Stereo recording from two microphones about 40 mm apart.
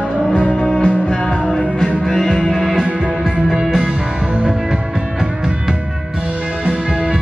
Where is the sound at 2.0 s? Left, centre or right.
Centre.